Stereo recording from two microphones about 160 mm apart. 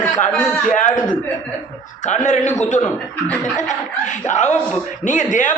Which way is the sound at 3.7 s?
50° left (ahead or behind).